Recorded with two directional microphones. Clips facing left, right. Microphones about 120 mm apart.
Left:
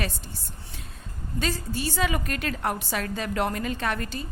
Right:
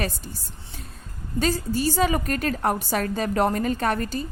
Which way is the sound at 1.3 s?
40° right (ahead or behind).